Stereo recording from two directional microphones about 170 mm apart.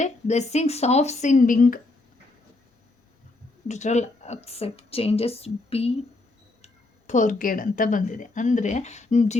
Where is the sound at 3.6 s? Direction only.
45° left (ahead or behind).